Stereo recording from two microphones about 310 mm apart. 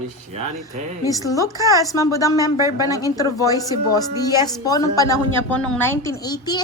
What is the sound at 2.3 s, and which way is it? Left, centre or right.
Speech, centre.